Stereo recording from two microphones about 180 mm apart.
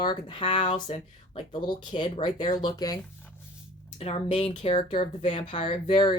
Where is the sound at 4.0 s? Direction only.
35° left (ahead or behind).